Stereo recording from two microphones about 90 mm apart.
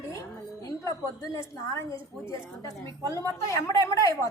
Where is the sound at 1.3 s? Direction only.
35° left (ahead or behind).